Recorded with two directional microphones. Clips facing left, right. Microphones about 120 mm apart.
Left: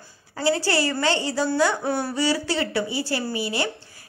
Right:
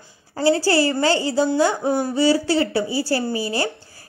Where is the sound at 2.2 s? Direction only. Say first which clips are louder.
Right 8 dB; 30° right (ahead or behind).